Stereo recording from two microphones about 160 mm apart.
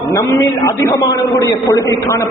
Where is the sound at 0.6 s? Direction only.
20° left (ahead or behind).